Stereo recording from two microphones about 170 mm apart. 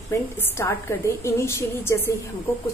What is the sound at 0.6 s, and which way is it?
A woman's voice, 15° left (ahead or behind).